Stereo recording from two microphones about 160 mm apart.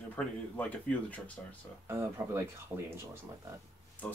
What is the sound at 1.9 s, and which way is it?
Speech, 15° right (ahead or behind).